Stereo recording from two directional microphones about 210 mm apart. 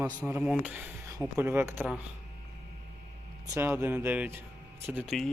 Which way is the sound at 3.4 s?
15° right (ahead or behind).